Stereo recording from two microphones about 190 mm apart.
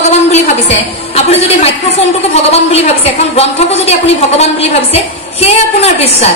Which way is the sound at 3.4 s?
35° left (ahead or behind).